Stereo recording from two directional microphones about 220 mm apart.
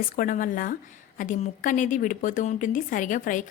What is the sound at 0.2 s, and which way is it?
A woman's voice, 40° left (ahead or behind).